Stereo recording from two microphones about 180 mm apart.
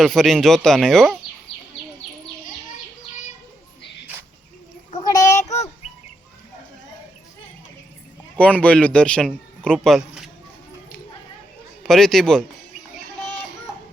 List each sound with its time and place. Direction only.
0.0 s speech: centre (ahead or behind)
5.0 s child singing: 20° left (ahead or behind)
5.4 s child singing: 40° left (ahead or behind)
8.4 s a man's voice: 5° left (ahead or behind)
11.9 s speech: centre (ahead or behind)